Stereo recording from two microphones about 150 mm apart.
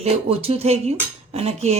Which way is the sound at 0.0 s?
40° right (ahead or behind).